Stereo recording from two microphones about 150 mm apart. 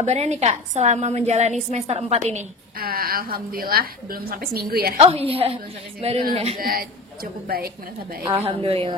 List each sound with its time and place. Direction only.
0.0 s a woman's voice: 50° right (ahead or behind)
2.8 s a woman's voice: 90° right
5.0 s a woman's voice: 40° right (ahead or behind)
6.6 s a man's voice: 75° right (ahead or behind)
7.4 s a woman's voice: 90° right
8.5 s a woman's voice: 40° right (ahead or behind)